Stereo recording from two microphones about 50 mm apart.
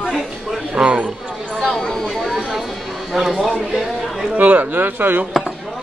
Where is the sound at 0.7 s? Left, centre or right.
Right.